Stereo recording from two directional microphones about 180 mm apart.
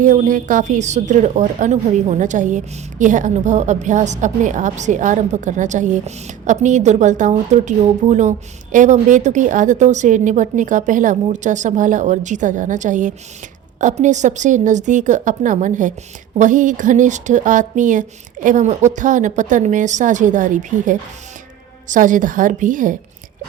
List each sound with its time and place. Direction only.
0.0 s a woman's voice: 45° right (ahead or behind)